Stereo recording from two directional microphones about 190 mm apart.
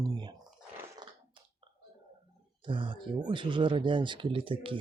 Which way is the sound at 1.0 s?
20° right (ahead or behind).